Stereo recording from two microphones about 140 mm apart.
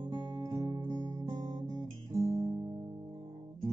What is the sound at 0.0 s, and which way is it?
Guitar, 30° right (ahead or behind).